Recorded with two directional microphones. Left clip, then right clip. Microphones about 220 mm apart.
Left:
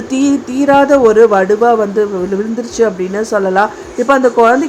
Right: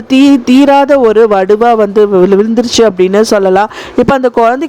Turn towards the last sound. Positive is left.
turn(degrees=-45)  # may be behind; listen again after turning